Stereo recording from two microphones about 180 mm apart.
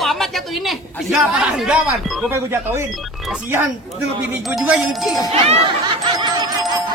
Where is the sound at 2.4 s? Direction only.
15° right (ahead or behind).